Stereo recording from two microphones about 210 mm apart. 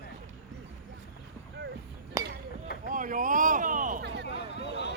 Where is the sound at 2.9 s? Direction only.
40° right (ahead or behind).